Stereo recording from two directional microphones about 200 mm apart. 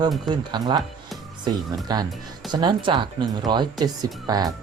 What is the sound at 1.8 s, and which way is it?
Speech, 20° right (ahead or behind).